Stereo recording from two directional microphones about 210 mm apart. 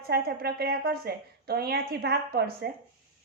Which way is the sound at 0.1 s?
50° right (ahead or behind).